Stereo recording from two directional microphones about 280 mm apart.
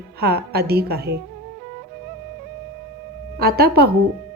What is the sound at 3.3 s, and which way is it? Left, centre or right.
Speech, right.